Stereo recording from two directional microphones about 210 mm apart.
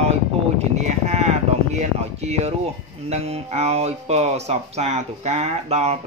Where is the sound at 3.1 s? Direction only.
30° right (ahead or behind).